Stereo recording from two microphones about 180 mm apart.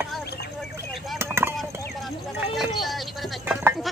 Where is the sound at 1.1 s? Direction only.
15° right (ahead or behind).